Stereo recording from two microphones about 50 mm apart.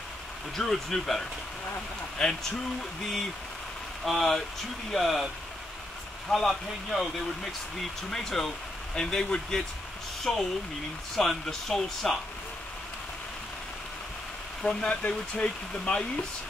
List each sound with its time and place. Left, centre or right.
0.6 s speech: centre
4.0 s speech: centre
8.1 s speech: centre
14.6 s speech: centre